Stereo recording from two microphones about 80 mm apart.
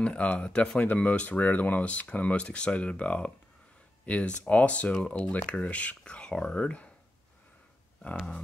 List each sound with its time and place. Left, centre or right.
0.0 s speech: centre